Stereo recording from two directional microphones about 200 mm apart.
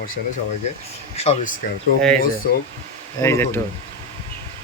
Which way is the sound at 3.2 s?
15° left (ahead or behind).